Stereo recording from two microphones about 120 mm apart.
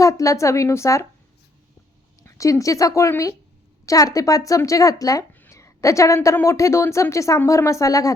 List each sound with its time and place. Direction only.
0.0 s speech: 25° left (ahead or behind)
2.2 s speech: 25° left (ahead or behind)
5.3 s a sound: 20° left (ahead or behind)
6.1 s speech: 20° left (ahead or behind)